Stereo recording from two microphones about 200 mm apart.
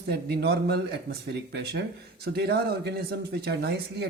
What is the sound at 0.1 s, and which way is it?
Speech, 55° right (ahead or behind).